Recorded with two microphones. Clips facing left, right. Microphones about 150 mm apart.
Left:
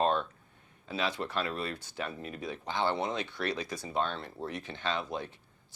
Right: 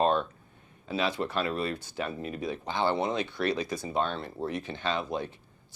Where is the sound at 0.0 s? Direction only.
10° right (ahead or behind).